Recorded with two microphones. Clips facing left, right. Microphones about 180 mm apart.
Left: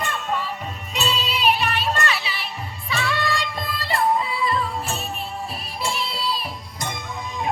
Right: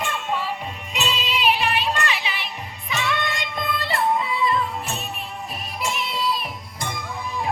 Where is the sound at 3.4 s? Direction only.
30° left (ahead or behind).